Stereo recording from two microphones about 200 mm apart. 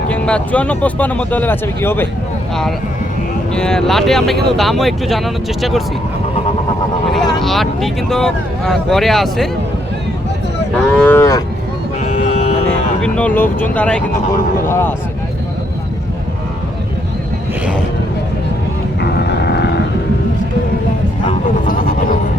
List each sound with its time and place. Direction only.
0.1 s speech: 5° left (ahead or behind)
3.5 s speech: 5° left (ahead or behind)
7.2 s speech: centre (ahead or behind)
10.9 s cattle: 10° left (ahead or behind)
13.0 s speech: 5° left (ahead or behind)
18.9 s vehicle: 55° left (ahead or behind)